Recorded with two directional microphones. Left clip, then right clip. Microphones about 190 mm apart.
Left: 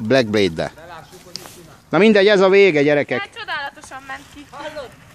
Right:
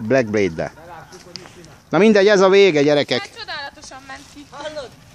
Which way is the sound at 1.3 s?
55° left (ahead or behind).